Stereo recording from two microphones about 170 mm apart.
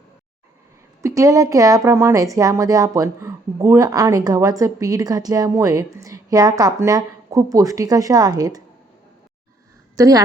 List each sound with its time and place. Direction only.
1.0 s speech: 20° right (ahead or behind)
10.0 s speech: 20° right (ahead or behind)